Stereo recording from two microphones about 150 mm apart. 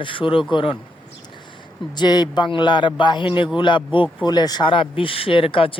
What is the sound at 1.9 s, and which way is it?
Speech, 30° left (ahead or behind).